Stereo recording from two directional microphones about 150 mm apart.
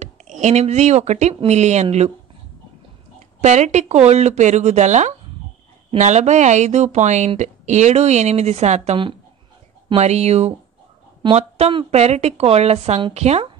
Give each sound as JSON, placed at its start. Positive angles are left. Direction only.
{"t": 0.4, "sound": "speech", "side_deg": -50}
{"t": 3.3, "sound": "speech", "side_deg": -50}